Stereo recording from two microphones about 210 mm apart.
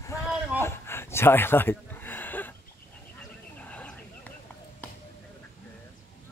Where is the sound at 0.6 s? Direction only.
10° left (ahead or behind).